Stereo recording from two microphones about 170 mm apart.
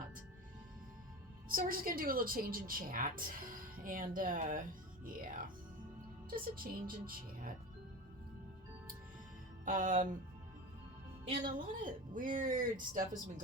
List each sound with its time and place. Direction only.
1.5 s a woman's voice: 55° right (ahead or behind)
9.6 s speech: 50° right (ahead or behind)
11.5 s speech: 50° right (ahead or behind)